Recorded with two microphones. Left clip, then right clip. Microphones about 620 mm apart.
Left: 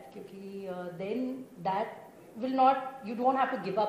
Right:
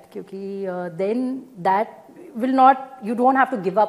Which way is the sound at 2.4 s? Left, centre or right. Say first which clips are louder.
Right 10 dB; right.